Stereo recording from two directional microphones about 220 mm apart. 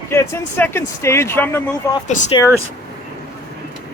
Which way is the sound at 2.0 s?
35° left (ahead or behind).